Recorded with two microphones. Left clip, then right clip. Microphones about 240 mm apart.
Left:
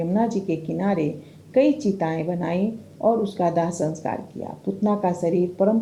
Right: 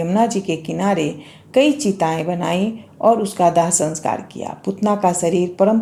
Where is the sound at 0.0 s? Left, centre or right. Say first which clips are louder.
Right 6 dB; centre.